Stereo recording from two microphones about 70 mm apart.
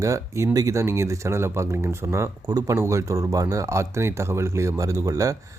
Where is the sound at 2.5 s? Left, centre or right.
Right.